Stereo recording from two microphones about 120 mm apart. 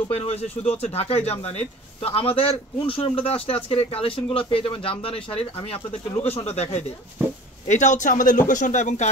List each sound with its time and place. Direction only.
0.1 s a man's voice: 60° left (ahead or behind)
7.6 s speech: 85° left